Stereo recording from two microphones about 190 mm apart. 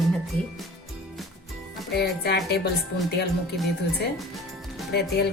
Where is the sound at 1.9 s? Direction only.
60° left (ahead or behind).